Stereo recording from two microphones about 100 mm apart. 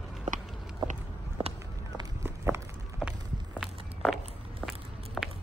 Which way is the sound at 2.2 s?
25° right (ahead or behind).